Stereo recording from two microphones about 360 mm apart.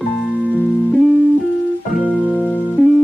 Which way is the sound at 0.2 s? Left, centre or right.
Centre.